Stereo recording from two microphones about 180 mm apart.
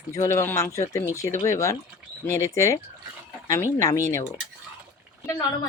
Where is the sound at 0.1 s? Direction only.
15° left (ahead or behind).